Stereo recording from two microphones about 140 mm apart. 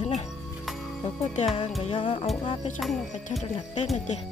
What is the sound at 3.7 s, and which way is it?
Speech, 55° left (ahead or behind).